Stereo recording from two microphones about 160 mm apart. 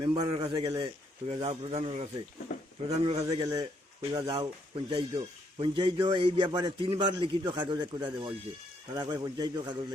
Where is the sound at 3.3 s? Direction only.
25° right (ahead or behind).